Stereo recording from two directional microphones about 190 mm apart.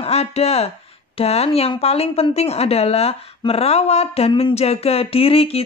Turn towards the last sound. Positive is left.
turn(degrees=30)  # may be behind; listen again after turning